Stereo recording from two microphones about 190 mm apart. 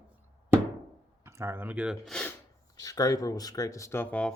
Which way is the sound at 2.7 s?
20° left (ahead or behind).